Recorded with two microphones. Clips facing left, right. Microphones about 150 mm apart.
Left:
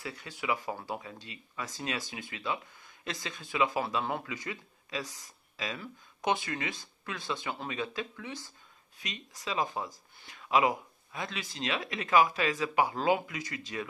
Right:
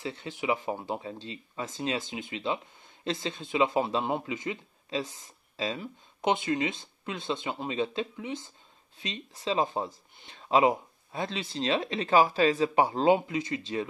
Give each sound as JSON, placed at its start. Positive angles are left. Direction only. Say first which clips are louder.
{"t": 0.0, "sound": "speech", "louder": "right 5 dB", "side_deg": -25}